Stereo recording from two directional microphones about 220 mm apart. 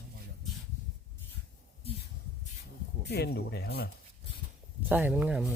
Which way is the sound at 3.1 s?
45° left (ahead or behind).